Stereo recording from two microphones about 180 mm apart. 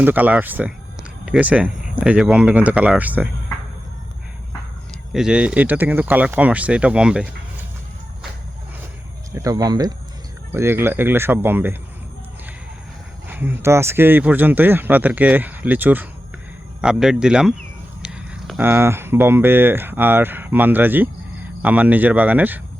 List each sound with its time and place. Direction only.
0.0 s speech: 10° right (ahead or behind)
5.1 s speech: 5° right (ahead or behind)
9.3 s speech: 20° right (ahead or behind)
13.2 s speech: 10° right (ahead or behind)